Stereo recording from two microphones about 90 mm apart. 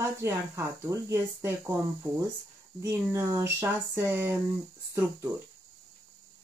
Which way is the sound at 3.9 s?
30° right (ahead or behind).